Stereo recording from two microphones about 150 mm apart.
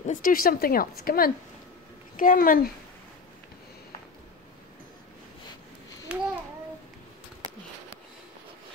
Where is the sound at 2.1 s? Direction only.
65° left (ahead or behind).